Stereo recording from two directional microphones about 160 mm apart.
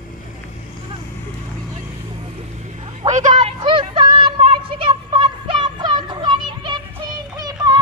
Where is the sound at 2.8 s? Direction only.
45° right (ahead or behind).